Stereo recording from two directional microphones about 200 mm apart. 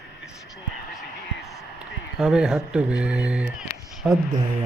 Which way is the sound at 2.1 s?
5° right (ahead or behind).